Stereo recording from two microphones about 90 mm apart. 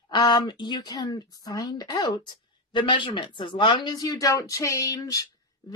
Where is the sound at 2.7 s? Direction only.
60° left (ahead or behind).